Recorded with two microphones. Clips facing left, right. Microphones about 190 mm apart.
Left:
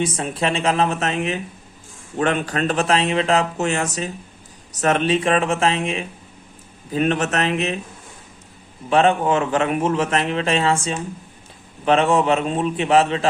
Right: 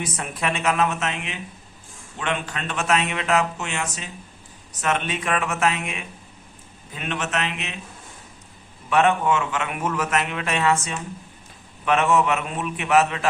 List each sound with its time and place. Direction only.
0.0 s speech: 30° left (ahead or behind)
8.9 s a man's voice: 30° left (ahead or behind)